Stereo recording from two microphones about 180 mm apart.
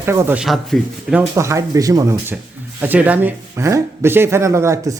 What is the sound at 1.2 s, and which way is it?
Speech, 15° right (ahead or behind).